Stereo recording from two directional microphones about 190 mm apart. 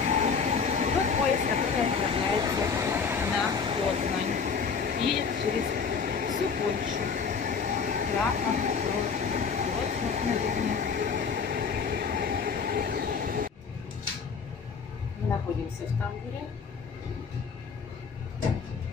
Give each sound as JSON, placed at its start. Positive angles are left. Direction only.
{"t": 0.0, "sound": "vehicle", "side_deg": -40}
{"t": 2.4, "sound": "vehicle", "side_deg": -15}
{"t": 3.5, "sound": "vehicle", "side_deg": -30}
{"t": 8.5, "sound": "a sound", "side_deg": -40}